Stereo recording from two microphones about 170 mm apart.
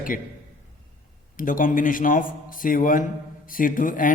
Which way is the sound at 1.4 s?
55° left (ahead or behind).